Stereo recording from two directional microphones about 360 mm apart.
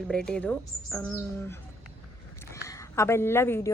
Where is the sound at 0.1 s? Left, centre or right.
Centre.